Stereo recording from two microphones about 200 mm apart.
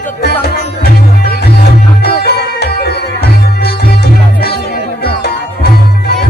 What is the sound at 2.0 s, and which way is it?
Music, 55° left (ahead or behind).